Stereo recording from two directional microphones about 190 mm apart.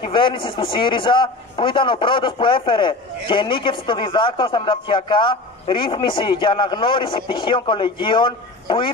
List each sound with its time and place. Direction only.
0.0 s a man's voice: 25° left (ahead or behind)